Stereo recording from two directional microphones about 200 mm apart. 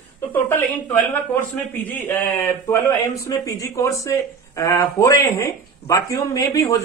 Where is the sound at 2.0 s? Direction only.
15° left (ahead or behind).